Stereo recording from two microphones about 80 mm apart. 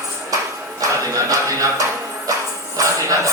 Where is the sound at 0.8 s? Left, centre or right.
Right.